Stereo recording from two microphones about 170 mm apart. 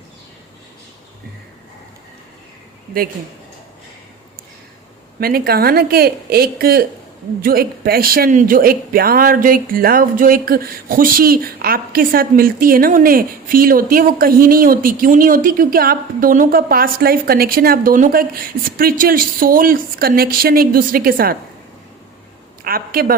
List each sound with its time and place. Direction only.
5.2 s speech: 65° right (ahead or behind)
22.6 s speech: 60° right (ahead or behind)